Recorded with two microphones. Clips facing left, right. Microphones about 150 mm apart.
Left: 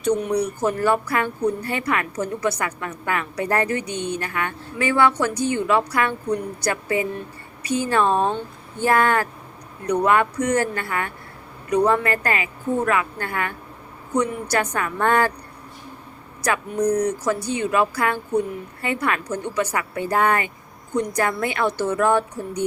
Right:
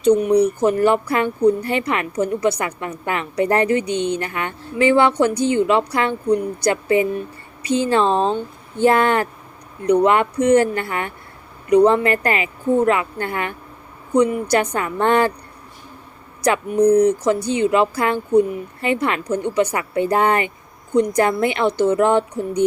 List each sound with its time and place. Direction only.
0.0 s a woman's voice: 20° right (ahead or behind)
17.0 s a woman's voice: 20° right (ahead or behind)